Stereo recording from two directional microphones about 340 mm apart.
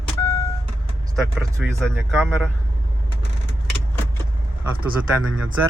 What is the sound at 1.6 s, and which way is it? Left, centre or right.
Speech, centre.